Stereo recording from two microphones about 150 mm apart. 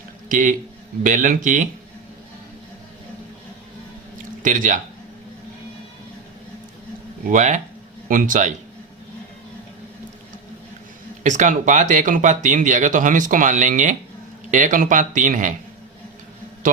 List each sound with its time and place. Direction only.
0.3 s speech: 60° right (ahead or behind)
4.4 s speech: 60° right (ahead or behind)
7.3 s speech: 55° right (ahead or behind)
8.0 s speech: 65° right (ahead or behind)
11.2 s speech: 55° right (ahead or behind)